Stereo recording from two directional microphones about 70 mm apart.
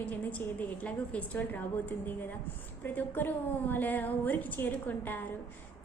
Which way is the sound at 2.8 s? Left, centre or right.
Left.